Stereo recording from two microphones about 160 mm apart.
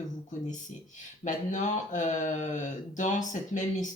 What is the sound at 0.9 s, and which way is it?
Speech, 50° left (ahead or behind).